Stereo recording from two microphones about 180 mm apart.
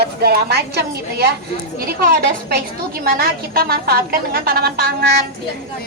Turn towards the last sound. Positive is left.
turn(degrees=-60)  # may be behind; listen again after turning